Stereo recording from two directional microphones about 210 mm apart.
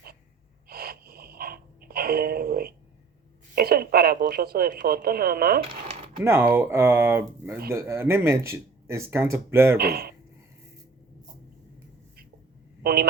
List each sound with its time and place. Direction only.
0.7 s music: 45° right (ahead or behind)
3.5 s speech: 45° right (ahead or behind)
6.2 s speech: 10° right (ahead or behind)
9.7 s speech: 45° right (ahead or behind)
12.8 s a sound: 45° right (ahead or behind)